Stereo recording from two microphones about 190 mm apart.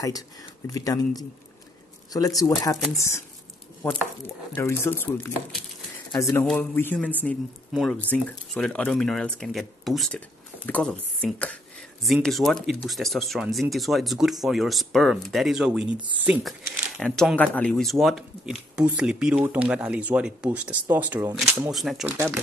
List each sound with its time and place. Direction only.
0.7 s speech: 20° left (ahead or behind)
4.6 s speech: 15° left (ahead or behind)
22.0 s speech: 15° right (ahead or behind)